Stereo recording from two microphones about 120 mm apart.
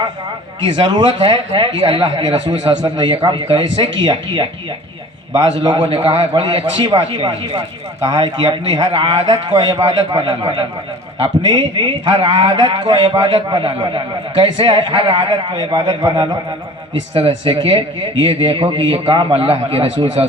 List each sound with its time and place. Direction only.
0.6 s a man's voice: 45° right (ahead or behind)